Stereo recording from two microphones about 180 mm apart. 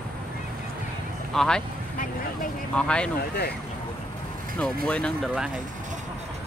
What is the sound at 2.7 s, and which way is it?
Speech, 5° left (ahead or behind).